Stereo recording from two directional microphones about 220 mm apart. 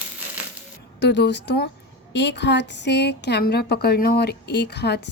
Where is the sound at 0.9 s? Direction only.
50° left (ahead or behind).